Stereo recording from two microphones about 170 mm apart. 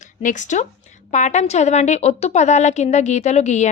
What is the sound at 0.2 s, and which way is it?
A woman's voice, 50° left (ahead or behind).